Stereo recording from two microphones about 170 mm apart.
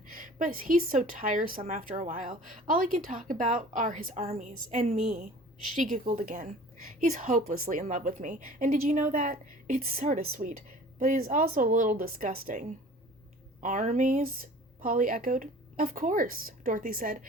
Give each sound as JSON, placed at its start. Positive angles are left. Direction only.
{"t": 0.1, "sound": "a woman's voice", "side_deg": -55}